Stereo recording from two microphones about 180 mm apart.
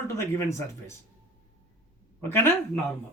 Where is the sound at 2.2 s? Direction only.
15° left (ahead or behind).